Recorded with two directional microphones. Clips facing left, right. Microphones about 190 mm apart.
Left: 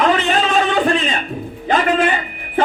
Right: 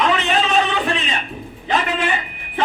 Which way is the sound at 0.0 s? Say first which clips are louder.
Left 3 dB; 45° left (ahead or behind).